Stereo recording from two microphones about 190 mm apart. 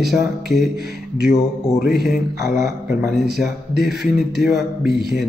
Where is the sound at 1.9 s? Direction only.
Centre (ahead or behind).